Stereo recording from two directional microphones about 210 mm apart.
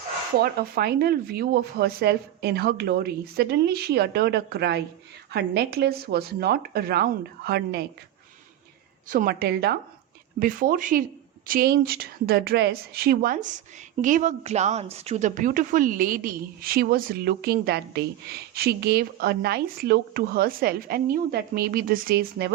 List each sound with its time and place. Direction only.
0.4 s speech: 50° right (ahead or behind)
9.0 s speech: 40° right (ahead or behind)